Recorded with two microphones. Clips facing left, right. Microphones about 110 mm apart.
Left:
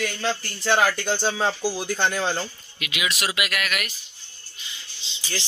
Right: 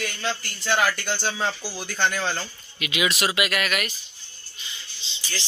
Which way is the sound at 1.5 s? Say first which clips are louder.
Left 4 dB; 15° left (ahead or behind).